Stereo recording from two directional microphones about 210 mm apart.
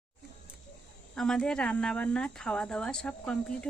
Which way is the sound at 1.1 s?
5° left (ahead or behind).